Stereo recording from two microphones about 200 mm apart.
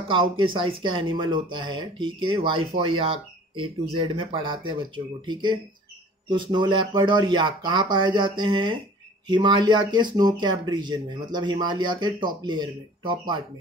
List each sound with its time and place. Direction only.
0.1 s speech: 25° right (ahead or behind)